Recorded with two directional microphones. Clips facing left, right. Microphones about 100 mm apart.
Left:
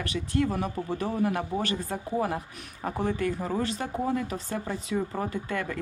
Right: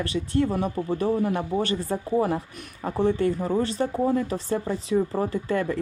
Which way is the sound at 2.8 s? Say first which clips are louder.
Right 5 dB; 25° right (ahead or behind).